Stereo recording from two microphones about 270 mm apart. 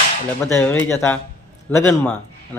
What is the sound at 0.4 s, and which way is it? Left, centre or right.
A man's voice, centre.